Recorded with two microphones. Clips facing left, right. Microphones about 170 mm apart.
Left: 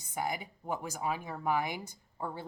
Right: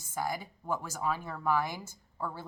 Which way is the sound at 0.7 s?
15° left (ahead or behind).